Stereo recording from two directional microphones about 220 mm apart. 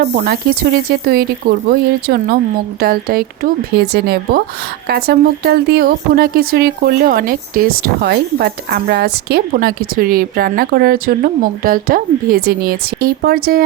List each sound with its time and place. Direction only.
0.0 s speech: 45° right (ahead or behind)